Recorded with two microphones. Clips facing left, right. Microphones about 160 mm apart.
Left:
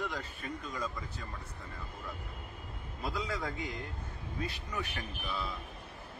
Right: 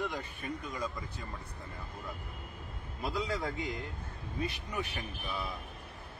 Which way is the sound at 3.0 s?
20° right (ahead or behind).